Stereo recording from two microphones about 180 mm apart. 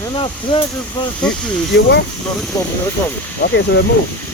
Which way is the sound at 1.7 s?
70° left (ahead or behind).